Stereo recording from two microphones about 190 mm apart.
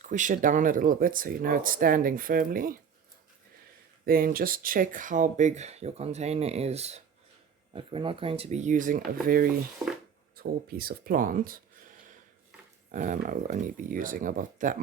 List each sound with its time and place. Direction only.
0.0 s speech: 40° right (ahead or behind)
4.0 s speech: 50° right (ahead or behind)
9.8 s a sound: 5° right (ahead or behind)
10.3 s speech: 50° right (ahead or behind)
12.9 s speech: 40° right (ahead or behind)